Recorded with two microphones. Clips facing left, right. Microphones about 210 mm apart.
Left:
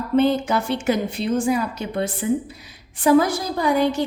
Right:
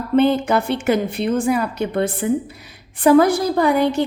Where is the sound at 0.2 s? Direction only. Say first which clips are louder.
Right 3 dB; 60° right (ahead or behind).